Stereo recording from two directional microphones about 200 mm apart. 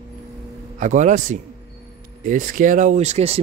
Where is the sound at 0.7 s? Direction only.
40° right (ahead or behind).